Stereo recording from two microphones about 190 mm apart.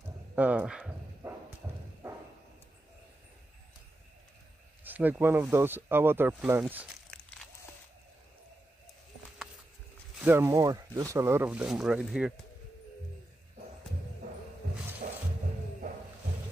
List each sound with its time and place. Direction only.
0.4 s a sound: 10° right (ahead or behind)
4.8 s speech: 10° right (ahead or behind)
7.1 s crumpling: 5° left (ahead or behind)
10.1 s speech: 10° right (ahead or behind)
15.0 s music: 45° right (ahead or behind)